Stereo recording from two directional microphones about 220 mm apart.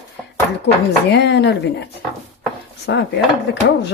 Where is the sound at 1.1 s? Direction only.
50° left (ahead or behind).